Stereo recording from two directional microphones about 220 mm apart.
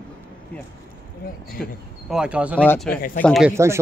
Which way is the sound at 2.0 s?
5° right (ahead or behind).